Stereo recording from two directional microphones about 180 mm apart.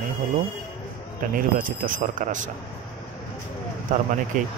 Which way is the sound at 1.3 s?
50° right (ahead or behind).